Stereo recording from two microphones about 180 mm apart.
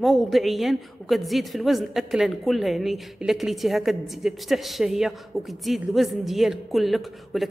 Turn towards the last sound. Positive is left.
turn(degrees=0)  # may be behind; listen again after turning